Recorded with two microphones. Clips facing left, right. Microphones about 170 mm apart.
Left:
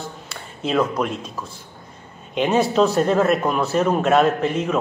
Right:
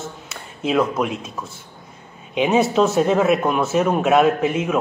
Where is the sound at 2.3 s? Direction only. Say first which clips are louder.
Right 1 dB; 5° right (ahead or behind).